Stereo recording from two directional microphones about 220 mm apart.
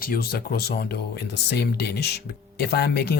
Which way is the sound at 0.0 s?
45° left (ahead or behind).